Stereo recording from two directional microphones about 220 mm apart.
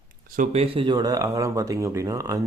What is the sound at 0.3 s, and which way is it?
Speech, 30° right (ahead or behind).